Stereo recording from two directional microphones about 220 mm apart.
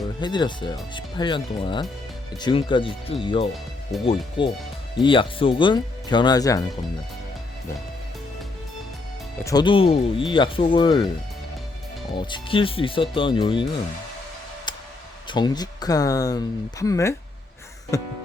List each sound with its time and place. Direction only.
0.2 s speech: 20° left (ahead or behind)
9.4 s speech: 15° left (ahead or behind)
12.1 s speech: 20° left (ahead or behind)
15.3 s speech: 20° left (ahead or behind)